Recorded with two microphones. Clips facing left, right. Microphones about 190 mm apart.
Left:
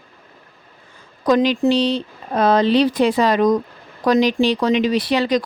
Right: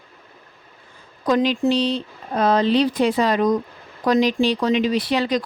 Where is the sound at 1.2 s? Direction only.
85° left.